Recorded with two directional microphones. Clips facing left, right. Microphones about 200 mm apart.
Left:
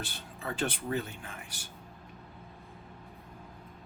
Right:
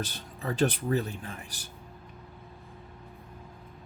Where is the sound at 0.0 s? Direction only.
40° right (ahead or behind).